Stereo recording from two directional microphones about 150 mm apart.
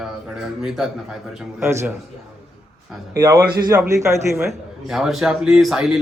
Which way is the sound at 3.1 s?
20° right (ahead or behind).